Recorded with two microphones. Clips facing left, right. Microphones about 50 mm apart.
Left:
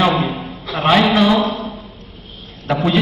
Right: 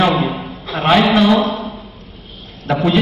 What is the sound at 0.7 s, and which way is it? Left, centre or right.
Speech, centre.